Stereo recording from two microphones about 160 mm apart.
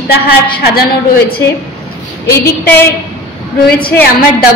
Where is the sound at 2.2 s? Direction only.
20° left (ahead or behind).